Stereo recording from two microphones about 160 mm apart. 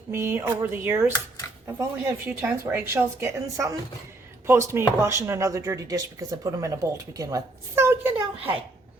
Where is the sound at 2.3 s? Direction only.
15° right (ahead or behind).